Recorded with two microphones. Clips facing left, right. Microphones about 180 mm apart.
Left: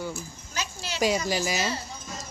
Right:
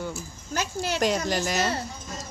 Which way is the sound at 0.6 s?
55° right (ahead or behind).